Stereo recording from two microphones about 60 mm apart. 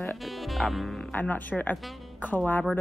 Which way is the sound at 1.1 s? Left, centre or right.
Left.